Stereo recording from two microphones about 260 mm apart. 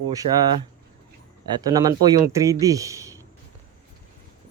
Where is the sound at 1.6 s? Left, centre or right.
Centre.